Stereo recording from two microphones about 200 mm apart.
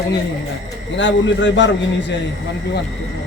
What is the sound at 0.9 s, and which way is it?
A man's voice, 65° left (ahead or behind).